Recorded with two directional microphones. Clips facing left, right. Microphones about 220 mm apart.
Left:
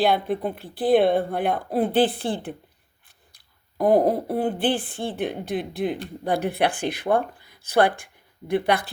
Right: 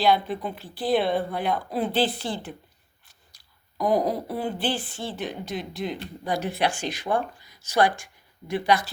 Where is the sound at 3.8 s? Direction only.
55° left (ahead or behind).